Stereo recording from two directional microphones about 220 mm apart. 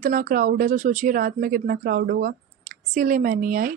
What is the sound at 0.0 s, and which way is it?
A woman's voice, 40° right (ahead or behind).